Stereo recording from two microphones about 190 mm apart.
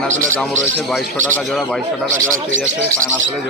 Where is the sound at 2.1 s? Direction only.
40° right (ahead or behind).